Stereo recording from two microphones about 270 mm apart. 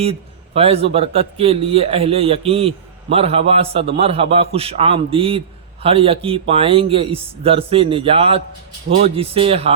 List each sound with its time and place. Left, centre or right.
0.0 s a man's voice: right